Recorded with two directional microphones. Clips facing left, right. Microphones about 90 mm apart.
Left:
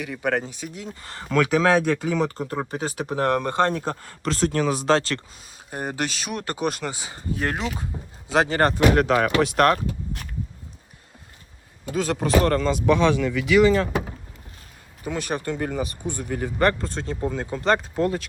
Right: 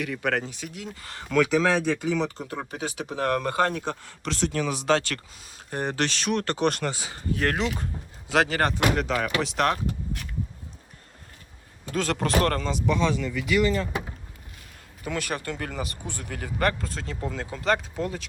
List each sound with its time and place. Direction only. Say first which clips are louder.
0.0 s speech: left 2 dB; 20° left (ahead or behind); by 1.4 s 35° left (ahead or behind)
1.4 s speech: left 3 dB; 50° left (ahead or behind)
3.3 s speech: left 3 dB; 25° left (ahead or behind)
5.5 s speech: right 1 dB; 10° left (ahead or behind)
6.9 s speech: even; 20° left (ahead or behind)
8.3 s speech: left 3 dB; 25° left (ahead or behind)
9.0 s speech: left 7 dB; 55° left (ahead or behind)
11.9 s speech: left 3 dB; 15° left (ahead or behind)
12.8 s speech: left 5 dB; 65° left (ahead or behind); by 14.0 s 90° left
15.0 s speech: left 3 dB; 25° left (ahead or behind)